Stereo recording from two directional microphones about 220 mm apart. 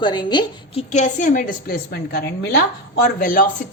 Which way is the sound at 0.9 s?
35° left (ahead or behind).